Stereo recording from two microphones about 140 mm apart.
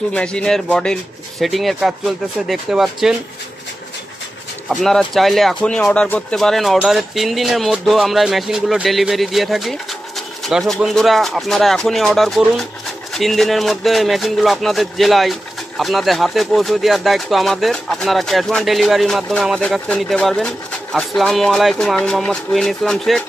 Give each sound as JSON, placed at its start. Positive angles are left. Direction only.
{"t": 0.1, "sound": "speech", "side_deg": 5}
{"t": 4.7, "sound": "speech", "side_deg": 5}